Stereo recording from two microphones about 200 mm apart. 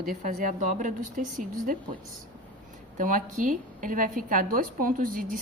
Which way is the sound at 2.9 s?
40° right (ahead or behind).